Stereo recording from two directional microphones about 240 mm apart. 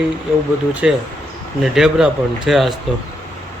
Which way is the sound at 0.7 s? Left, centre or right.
Centre.